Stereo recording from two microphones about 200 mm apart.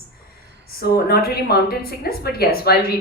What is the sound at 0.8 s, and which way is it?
A woman's voice, 50° left (ahead or behind).